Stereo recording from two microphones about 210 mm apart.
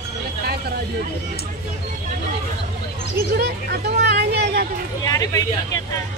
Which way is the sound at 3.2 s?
45° right (ahead or behind).